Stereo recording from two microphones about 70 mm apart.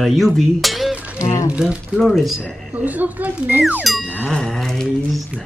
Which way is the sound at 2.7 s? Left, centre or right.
Right.